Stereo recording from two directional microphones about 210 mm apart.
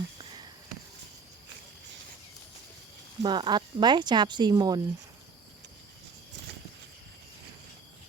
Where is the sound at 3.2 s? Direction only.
20° right (ahead or behind).